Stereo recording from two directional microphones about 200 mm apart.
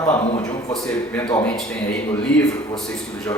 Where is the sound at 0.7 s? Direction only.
5° left (ahead or behind).